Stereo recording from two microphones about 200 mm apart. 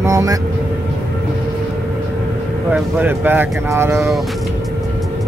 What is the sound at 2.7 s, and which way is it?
Speech, 10° right (ahead or behind).